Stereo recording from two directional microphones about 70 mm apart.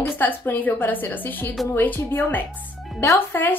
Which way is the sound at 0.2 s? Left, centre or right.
Left.